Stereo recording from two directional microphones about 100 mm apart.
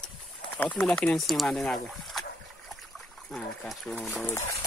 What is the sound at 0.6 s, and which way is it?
Speech, 15° left (ahead or behind).